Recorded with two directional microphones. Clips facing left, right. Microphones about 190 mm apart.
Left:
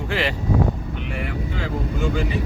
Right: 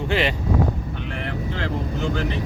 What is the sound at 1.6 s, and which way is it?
Speech, 10° left (ahead or behind).